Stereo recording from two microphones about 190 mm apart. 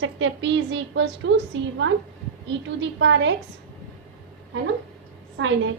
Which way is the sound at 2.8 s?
75° right (ahead or behind).